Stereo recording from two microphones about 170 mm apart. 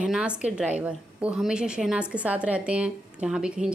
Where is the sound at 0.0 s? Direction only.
5° right (ahead or behind).